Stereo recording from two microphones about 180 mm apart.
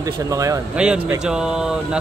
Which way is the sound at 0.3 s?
20° right (ahead or behind).